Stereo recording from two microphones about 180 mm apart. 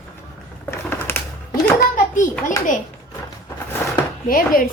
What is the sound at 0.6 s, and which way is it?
Typing, 15° left (ahead or behind).